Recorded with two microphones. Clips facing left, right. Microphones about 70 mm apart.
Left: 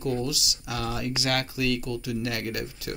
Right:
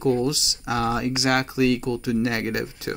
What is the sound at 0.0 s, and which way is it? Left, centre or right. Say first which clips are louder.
Speech: right 7 dB; right.